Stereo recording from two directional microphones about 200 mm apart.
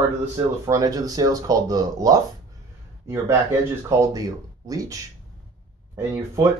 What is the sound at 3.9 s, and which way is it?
Speech, 15° right (ahead or behind).